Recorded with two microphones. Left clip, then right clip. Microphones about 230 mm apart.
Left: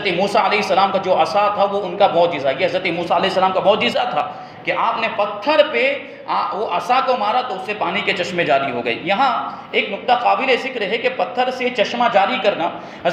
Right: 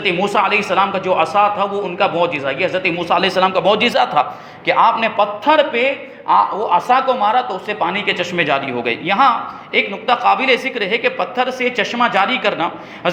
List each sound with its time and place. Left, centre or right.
0.0 s a man's voice: right